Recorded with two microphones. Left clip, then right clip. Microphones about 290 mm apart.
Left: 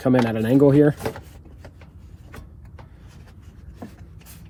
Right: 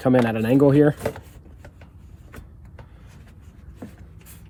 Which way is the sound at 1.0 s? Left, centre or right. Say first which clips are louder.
Right 1 dB; centre.